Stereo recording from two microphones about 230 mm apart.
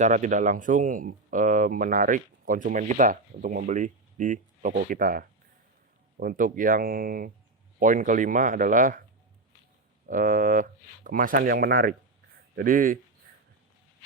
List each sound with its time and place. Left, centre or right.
0.0 s speech: right
10.1 s speech: right